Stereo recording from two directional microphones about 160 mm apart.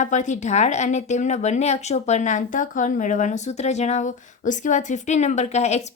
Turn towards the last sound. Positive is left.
turn(degrees=45)  # may be behind; listen again after turning